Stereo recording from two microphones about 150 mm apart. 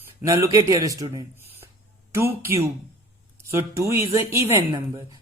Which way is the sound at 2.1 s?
15° right (ahead or behind).